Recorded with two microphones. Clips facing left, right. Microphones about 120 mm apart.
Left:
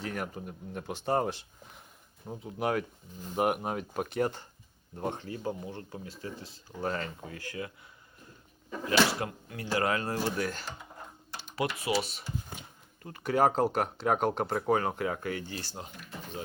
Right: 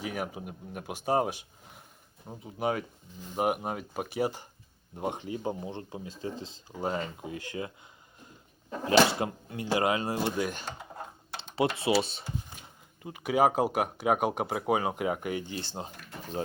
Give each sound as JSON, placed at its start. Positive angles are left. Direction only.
{"t": 0.0, "sound": "speech", "side_deg": -10}
{"t": 2.2, "sound": "speech", "side_deg": 0}
{"t": 8.8, "sound": "speech", "side_deg": -25}
{"t": 13.0, "sound": "speech", "side_deg": -15}